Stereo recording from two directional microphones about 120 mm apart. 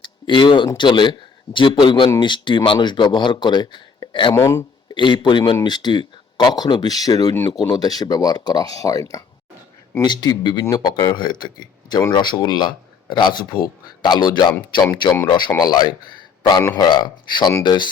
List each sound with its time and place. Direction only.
0.0 s a man's voice: 40° left (ahead or behind)
4.4 s speech: 25° left (ahead or behind)
4.9 s speech: 40° left (ahead or behind)